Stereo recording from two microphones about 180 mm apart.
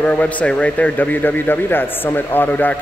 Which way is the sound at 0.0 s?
10° left (ahead or behind).